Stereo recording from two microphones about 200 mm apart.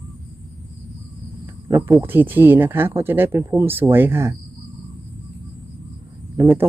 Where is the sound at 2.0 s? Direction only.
10° right (ahead or behind).